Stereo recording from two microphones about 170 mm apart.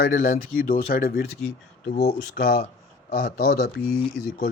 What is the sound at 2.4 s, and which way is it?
Speech, 65° left (ahead or behind).